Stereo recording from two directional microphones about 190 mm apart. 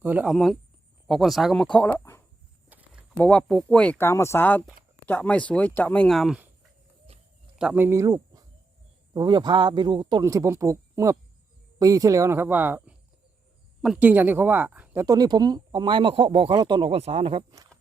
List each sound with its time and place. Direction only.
0.0 s speech: 10° right (ahead or behind); by 2.2 s 10° left (ahead or behind)
2.6 s a sound: 10° right (ahead or behind)
3.2 s speech: 5° left (ahead or behind)
7.6 s speech: 10° right (ahead or behind)
15.0 s speech: 20° right (ahead or behind)